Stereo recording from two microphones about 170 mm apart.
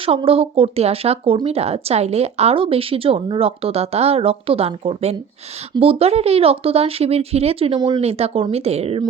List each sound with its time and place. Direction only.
0.0 s speech: 35° right (ahead or behind)